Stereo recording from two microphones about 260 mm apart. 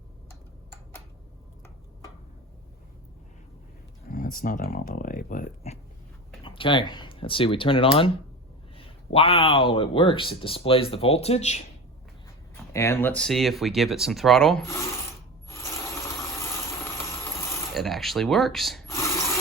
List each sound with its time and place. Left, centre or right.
4.1 s speech: left
9.1 s speech: left
12.7 s speech: centre
17.7 s speech: centre